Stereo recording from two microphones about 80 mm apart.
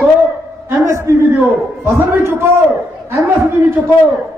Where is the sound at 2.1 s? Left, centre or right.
Right.